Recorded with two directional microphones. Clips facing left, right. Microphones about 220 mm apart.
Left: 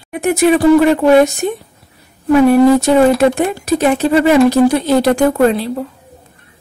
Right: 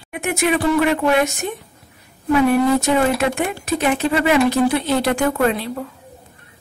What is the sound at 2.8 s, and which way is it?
Speech, 35° left (ahead or behind).